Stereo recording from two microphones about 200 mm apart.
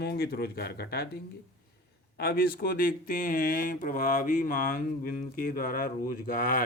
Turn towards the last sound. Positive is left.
turn(degrees=40)  # may be behind; listen again after turning